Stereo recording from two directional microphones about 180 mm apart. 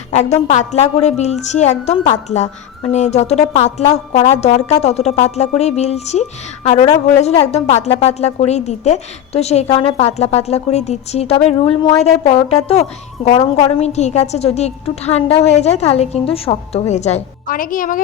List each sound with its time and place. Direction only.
0.1 s a woman's voice: 40° left (ahead or behind)
6.7 s a woman's voice: 25° left (ahead or behind)
7.2 s a woman's voice: 35° left (ahead or behind)